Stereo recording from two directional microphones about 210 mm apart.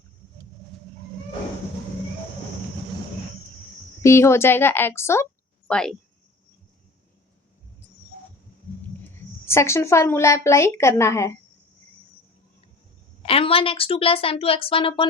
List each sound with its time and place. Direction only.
4.0 s speech: 15° left (ahead or behind)
9.0 s a woman's voice: 10° left (ahead or behind)
13.2 s a woman's voice: 25° left (ahead or behind)